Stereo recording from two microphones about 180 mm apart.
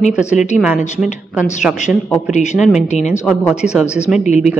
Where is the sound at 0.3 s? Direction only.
40° left (ahead or behind).